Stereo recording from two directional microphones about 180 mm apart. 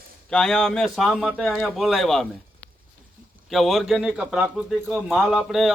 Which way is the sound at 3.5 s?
Centre (ahead or behind).